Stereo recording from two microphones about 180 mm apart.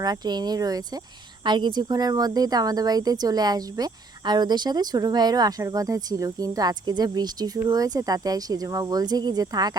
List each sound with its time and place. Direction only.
0.0 s speech: 20° right (ahead or behind)